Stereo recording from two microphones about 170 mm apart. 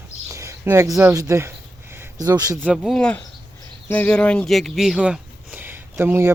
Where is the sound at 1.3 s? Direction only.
15° right (ahead or behind).